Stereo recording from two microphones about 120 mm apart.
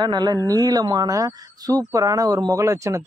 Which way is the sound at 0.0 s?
35° right (ahead or behind).